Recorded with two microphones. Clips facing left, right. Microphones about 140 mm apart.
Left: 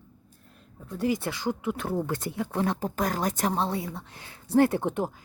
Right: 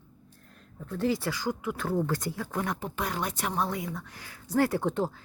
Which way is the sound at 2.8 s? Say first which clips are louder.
Left 4 dB; 40° left (ahead or behind).